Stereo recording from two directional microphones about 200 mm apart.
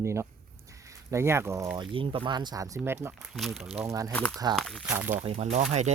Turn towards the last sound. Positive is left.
turn(degrees=-35)  # may be behind; listen again after turning